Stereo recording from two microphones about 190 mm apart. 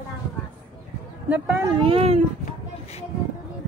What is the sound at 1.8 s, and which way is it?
Speech, 30° right (ahead or behind).